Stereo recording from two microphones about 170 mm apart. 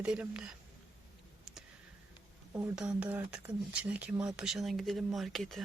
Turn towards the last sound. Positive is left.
turn(degrees=0)  # may be behind; listen again after turning